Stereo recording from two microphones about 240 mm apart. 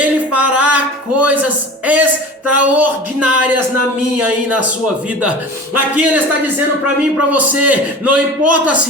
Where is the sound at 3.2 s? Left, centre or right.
Right.